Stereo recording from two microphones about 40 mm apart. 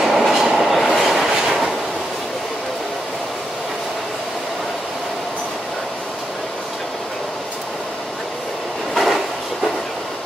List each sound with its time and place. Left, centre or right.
0.0 s train: centre
1.3 s train: centre
8.9 s train: centre